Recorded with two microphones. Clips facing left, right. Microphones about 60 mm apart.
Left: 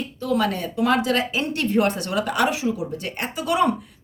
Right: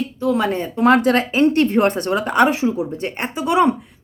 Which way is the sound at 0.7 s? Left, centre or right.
Right.